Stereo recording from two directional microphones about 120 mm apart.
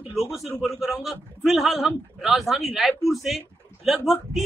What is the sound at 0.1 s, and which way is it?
Speech, centre (ahead or behind).